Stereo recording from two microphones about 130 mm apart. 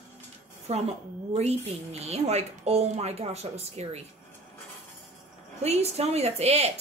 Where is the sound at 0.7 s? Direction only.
55° right (ahead or behind).